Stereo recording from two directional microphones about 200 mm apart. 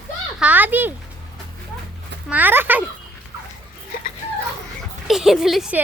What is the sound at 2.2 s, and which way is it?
Speech, 10° right (ahead or behind).